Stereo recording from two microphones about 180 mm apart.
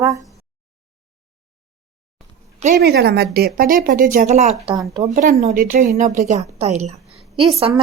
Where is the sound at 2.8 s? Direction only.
65° right (ahead or behind); by 4.6 s 40° right (ahead or behind).